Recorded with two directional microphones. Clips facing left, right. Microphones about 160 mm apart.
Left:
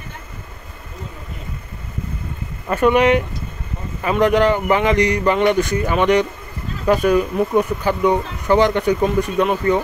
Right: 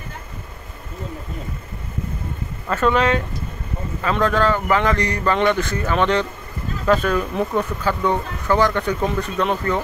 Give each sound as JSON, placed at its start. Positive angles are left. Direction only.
{"t": 2.7, "sound": "speech", "side_deg": 15}